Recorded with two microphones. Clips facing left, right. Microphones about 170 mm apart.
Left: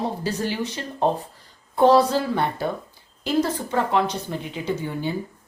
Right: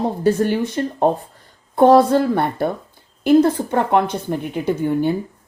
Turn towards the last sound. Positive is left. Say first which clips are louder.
# right 8 dB
turn(degrees=-55)  # may be behind; listen again after turning